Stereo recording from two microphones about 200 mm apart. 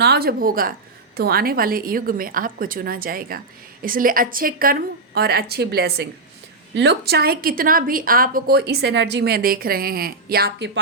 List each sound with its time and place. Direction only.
0.0 s a woman's voice: 50° right (ahead or behind)